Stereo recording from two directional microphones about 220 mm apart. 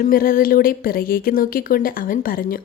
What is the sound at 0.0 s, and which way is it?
Speech, 40° left (ahead or behind).